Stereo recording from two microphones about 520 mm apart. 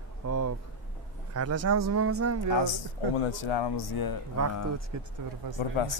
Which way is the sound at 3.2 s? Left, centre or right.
Left.